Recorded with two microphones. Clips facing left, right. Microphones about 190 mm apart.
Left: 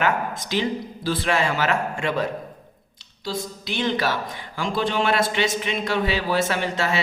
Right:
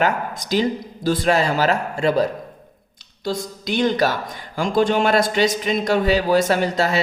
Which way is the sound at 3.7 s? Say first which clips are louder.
Right 5 dB; 45° right (ahead or behind).